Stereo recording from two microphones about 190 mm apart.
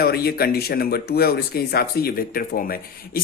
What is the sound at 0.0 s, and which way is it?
Speech, 55° left (ahead or behind).